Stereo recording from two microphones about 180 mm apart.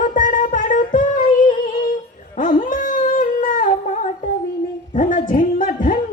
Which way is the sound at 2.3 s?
50° left (ahead or behind).